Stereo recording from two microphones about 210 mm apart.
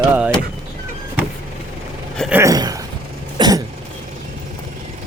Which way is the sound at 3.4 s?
15° right (ahead or behind).